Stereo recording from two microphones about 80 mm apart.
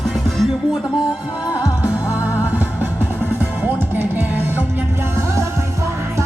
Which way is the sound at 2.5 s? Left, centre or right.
Right.